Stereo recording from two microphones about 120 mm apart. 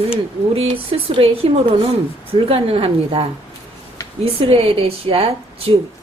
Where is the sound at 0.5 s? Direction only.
50° right (ahead or behind).